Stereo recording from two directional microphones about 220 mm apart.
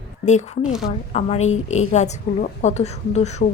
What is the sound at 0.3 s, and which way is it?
A woman's voice, 30° left (ahead or behind).